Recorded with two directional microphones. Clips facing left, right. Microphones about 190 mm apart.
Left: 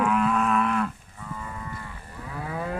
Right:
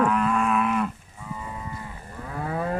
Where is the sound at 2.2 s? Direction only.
45° right (ahead or behind).